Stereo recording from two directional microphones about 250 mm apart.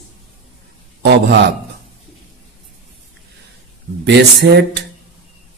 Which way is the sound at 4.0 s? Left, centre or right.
Right.